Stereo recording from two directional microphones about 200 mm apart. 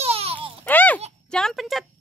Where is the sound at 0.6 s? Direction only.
10° left (ahead or behind).